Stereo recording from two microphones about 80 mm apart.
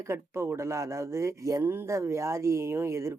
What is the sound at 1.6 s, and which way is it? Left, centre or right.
Speech, right.